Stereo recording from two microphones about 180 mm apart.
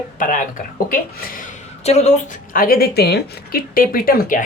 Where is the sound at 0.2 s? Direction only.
50° left (ahead or behind).